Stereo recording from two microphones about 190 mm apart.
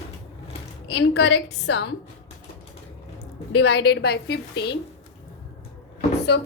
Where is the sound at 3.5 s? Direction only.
65° left (ahead or behind).